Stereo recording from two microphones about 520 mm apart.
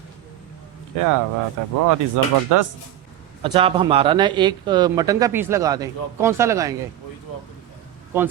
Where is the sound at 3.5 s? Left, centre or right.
Centre.